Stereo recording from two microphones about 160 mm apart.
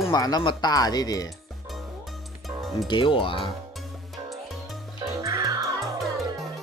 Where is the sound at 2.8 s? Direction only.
30° left (ahead or behind).